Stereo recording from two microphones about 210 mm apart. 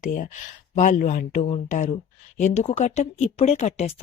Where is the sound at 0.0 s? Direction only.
35° left (ahead or behind).